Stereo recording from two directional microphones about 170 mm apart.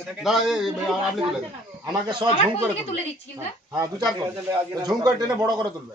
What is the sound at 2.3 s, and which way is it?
Speech, 40° left (ahead or behind).